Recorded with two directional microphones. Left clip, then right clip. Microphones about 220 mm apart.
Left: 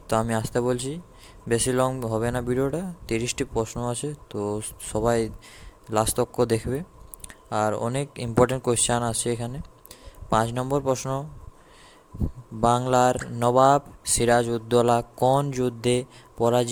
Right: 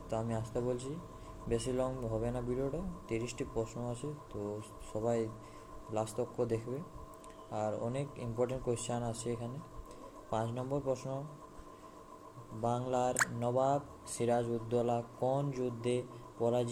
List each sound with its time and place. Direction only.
0.1 s speech: 45° left (ahead or behind)
12.6 s speech: 45° left (ahead or behind)